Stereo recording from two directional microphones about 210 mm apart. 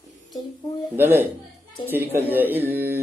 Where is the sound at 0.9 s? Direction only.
10° right (ahead or behind).